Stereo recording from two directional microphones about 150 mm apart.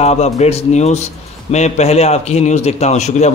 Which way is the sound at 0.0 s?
45° left (ahead or behind).